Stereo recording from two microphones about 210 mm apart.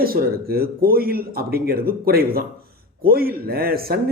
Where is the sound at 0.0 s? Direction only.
45° right (ahead or behind).